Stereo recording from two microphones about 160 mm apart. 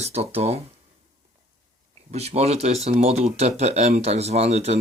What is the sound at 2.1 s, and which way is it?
Speech, 40° right (ahead or behind).